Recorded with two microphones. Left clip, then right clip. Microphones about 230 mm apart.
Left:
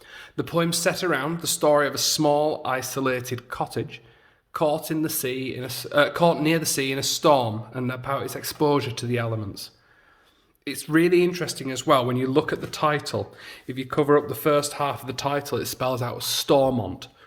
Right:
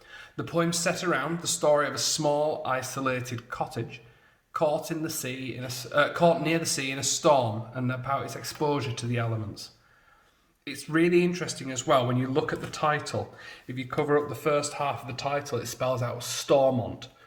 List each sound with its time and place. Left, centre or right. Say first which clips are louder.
0.1 s speech: left 5 dB; left